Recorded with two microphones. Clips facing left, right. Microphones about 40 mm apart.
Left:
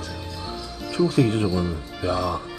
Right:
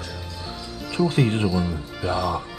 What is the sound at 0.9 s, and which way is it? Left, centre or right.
Speech, right.